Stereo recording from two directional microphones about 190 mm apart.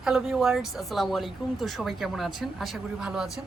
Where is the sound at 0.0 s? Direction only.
5° right (ahead or behind).